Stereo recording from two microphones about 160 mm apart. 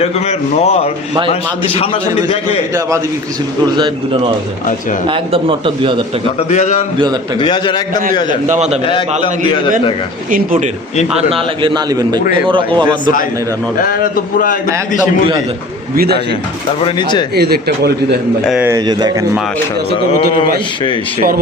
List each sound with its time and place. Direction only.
0.0 s a man's voice: 40° left (ahead or behind)
5.0 s a man's voice: 35° right (ahead or behind)
6.5 s speech: 45° left (ahead or behind)
7.3 s a man's voice: 30° left (ahead or behind)
8.4 s a man's voice: 45° right (ahead or behind)
11.2 s a man's voice: 35° right (ahead or behind)
13.7 s speech: 65° left (ahead or behind)
16.8 s a man's voice: 30° left (ahead or behind)
17.3 s a man's voice: 85° right
18.6 s a man's voice: 25° right (ahead or behind)
19.9 s speech: 75° right (ahead or behind)